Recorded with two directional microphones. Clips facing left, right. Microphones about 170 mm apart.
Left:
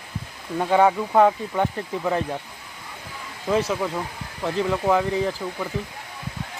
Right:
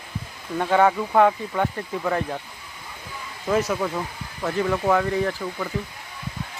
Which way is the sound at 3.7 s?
5° left (ahead or behind).